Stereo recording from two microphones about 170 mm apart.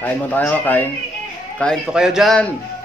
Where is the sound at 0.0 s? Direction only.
10° left (ahead or behind).